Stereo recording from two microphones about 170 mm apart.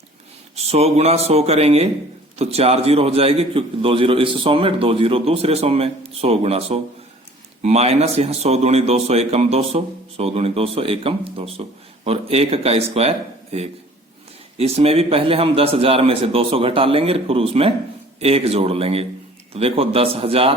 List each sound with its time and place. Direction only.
0.5 s a man's voice: 40° right (ahead or behind)